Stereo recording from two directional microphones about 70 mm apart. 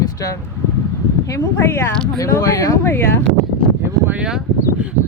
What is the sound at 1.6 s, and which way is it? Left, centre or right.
Speech, left.